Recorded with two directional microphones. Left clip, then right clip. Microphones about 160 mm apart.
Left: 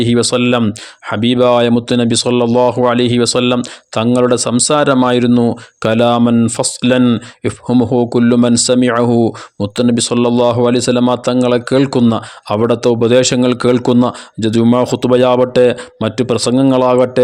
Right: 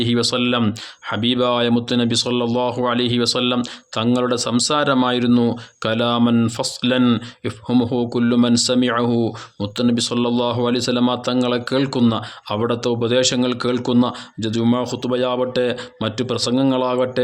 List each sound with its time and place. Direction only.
0.0 s speech: 45° left (ahead or behind)